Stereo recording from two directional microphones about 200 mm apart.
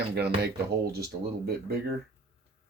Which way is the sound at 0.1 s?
55° right (ahead or behind).